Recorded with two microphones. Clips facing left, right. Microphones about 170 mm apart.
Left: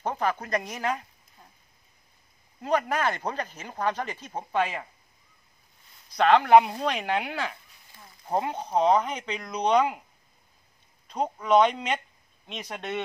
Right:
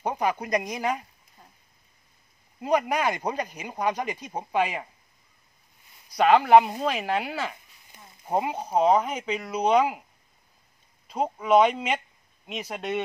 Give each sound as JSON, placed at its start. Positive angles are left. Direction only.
{"t": 0.0, "sound": "speech", "side_deg": -10}
{"t": 2.6, "sound": "speech", "side_deg": -10}
{"t": 6.0, "sound": "speech", "side_deg": -10}
{"t": 7.9, "sound": "a sound", "side_deg": -20}
{"t": 8.4, "sound": "speech", "side_deg": -10}
{"t": 11.1, "sound": "speech", "side_deg": -10}